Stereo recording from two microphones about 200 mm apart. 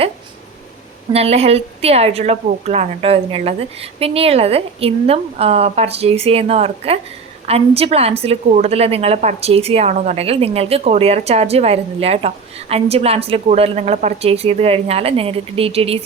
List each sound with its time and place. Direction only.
1.1 s a woman's voice: 30° right (ahead or behind)